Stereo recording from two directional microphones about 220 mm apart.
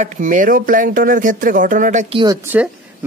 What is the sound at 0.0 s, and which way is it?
A man's voice, 35° right (ahead or behind).